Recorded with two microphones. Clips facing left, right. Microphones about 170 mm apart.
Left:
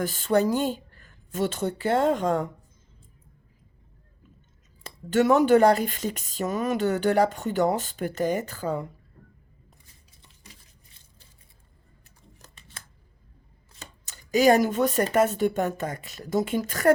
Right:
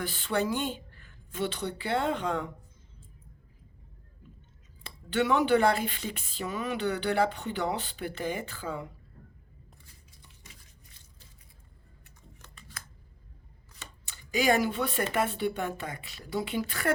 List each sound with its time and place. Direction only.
0.0 s speech: 40° left (ahead or behind)
4.8 s speech: 40° left (ahead or behind)
12.8 s scissors: 25° left (ahead or behind)
13.7 s speech: 40° left (ahead or behind)